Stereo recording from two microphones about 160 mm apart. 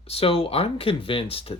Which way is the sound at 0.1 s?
35° left (ahead or behind).